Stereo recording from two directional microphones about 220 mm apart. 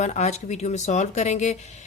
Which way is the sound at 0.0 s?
30° left (ahead or behind).